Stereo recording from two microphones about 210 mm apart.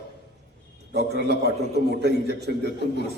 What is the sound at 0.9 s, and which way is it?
A man's voice, 50° right (ahead or behind).